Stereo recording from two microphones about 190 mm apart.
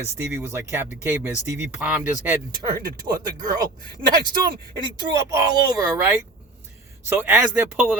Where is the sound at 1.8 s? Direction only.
5° right (ahead or behind).